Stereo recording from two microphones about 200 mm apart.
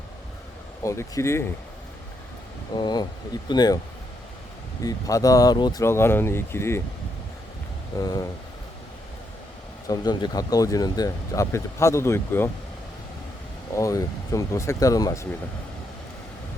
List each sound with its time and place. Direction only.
0.8 s speech: 15° left (ahead or behind)
2.7 s speech: 20° left (ahead or behind)
4.8 s speech: 15° left (ahead or behind)
7.9 s speech: 20° left (ahead or behind)
9.9 s speech: 20° left (ahead or behind)
13.7 s speech: 15° left (ahead or behind)